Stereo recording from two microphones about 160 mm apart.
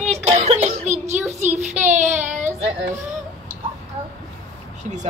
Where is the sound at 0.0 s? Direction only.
45° right (ahead or behind).